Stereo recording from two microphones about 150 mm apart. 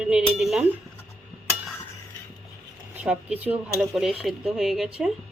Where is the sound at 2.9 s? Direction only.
10° right (ahead or behind).